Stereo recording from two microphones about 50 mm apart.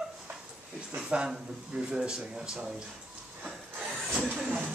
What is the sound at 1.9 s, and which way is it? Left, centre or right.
Speech, centre.